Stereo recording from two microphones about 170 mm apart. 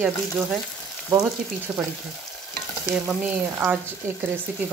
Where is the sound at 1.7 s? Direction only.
5° right (ahead or behind).